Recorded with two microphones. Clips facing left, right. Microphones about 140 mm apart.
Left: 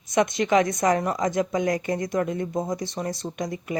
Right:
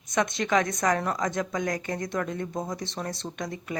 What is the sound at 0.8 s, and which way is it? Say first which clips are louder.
Speech: left 4 dB; 20° left (ahead or behind).